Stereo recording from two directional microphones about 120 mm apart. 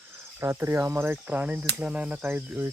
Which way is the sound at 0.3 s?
20° right (ahead or behind).